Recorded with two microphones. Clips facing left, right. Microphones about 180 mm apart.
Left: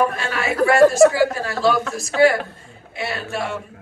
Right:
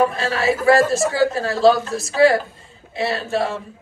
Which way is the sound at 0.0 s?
30° right (ahead or behind).